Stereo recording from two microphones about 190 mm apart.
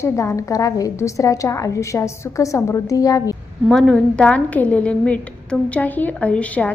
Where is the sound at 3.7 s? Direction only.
Centre (ahead or behind).